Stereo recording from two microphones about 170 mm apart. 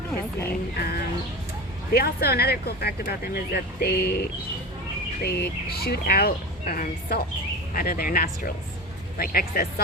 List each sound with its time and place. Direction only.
0.8 s speech: 65° left (ahead or behind)
5.2 s speech: 70° left (ahead or behind)